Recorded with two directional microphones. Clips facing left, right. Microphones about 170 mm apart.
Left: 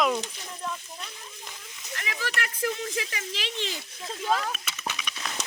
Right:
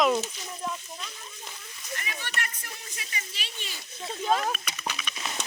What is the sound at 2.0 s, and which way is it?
Speech, 90° left.